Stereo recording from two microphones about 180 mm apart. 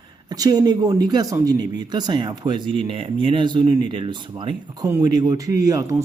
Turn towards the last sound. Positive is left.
turn(degrees=-20)  # may be behind; listen again after turning